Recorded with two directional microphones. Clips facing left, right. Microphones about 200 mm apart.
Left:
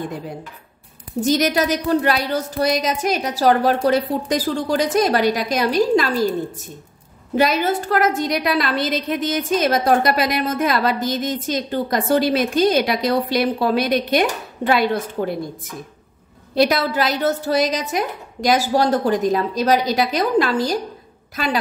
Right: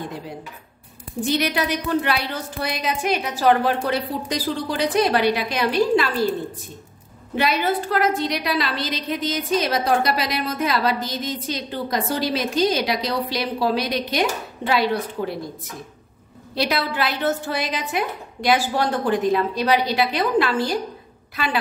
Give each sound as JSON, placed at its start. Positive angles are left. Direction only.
{"t": 1.2, "sound": "a woman's voice", "side_deg": 40}
{"t": 7.3, "sound": "a woman's voice", "side_deg": 45}
{"t": 16.5, "sound": "a woman's voice", "side_deg": 45}